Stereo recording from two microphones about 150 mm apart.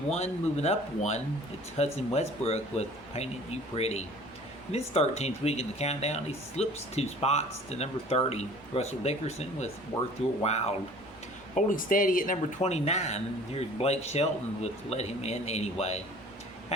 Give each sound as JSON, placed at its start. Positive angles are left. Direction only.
{"t": 0.1, "sound": "speech", "side_deg": 45}
{"t": 11.5, "sound": "speech", "side_deg": 65}